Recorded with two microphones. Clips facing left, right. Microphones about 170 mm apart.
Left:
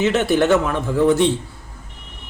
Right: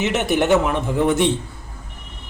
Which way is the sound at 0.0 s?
20° right (ahead or behind).